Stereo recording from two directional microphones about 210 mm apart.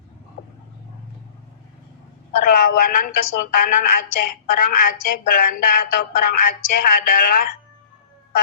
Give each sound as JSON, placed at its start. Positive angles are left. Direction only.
{"t": 2.4, "sound": "a woman's voice", "side_deg": 45}